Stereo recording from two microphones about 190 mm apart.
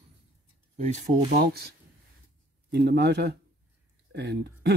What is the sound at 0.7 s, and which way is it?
Speech, 35° right (ahead or behind).